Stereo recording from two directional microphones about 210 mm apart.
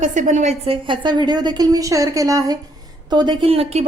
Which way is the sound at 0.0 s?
35° right (ahead or behind).